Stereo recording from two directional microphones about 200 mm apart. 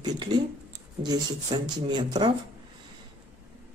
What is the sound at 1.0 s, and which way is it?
Speech, 20° right (ahead or behind).